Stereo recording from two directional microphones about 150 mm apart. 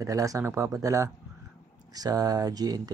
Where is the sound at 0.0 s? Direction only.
20° right (ahead or behind).